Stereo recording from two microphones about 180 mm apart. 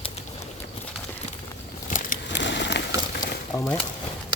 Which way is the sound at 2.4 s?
75° left (ahead or behind).